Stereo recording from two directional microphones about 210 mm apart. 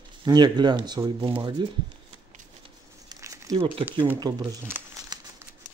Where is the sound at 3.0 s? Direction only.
15° right (ahead or behind).